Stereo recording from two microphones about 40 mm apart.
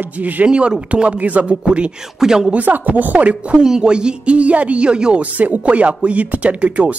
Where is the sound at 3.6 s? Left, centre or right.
Centre.